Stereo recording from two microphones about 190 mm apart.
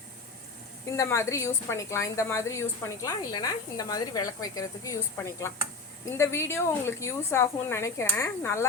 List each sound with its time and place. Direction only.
0.9 s a woman's voice: 15° left (ahead or behind)